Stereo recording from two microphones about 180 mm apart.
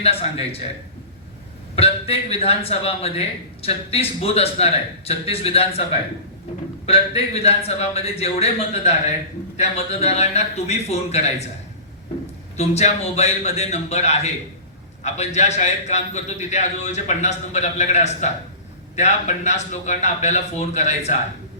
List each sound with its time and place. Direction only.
0.0 s speech: 35° left (ahead or behind)
1.7 s speech: 35° left (ahead or behind)
6.8 s speech: 35° left (ahead or behind)
12.5 s speech: 40° left (ahead or behind)